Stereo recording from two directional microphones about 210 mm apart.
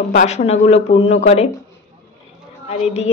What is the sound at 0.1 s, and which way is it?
A woman's voice, 35° left (ahead or behind).